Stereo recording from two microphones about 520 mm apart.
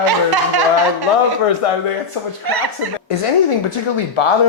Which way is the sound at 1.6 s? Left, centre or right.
Left.